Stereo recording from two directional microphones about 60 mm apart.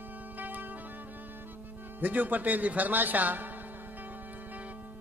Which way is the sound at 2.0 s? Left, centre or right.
Right.